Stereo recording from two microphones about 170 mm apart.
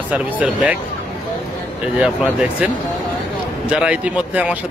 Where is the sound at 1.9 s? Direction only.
5° right (ahead or behind).